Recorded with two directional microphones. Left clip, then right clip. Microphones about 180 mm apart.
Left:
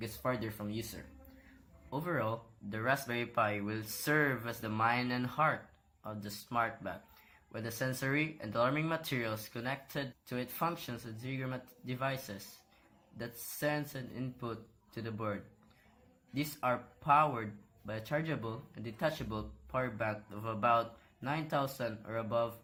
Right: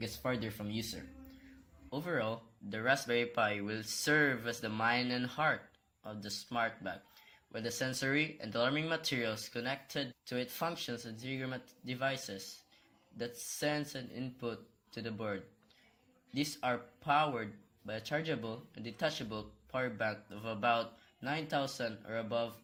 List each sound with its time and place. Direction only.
0.0 s speech: 30° right (ahead or behind)
1.9 s speech: 35° right (ahead or behind)